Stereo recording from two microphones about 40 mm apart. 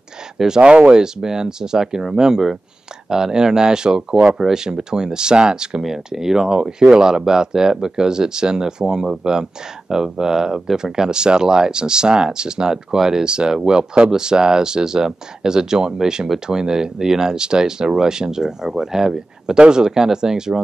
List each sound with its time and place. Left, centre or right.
0.6 s speech: right